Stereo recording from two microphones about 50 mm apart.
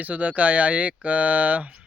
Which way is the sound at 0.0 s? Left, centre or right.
Right.